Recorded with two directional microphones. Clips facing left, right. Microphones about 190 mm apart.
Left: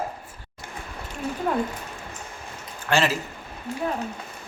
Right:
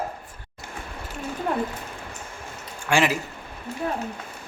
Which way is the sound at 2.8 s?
15° right (ahead or behind).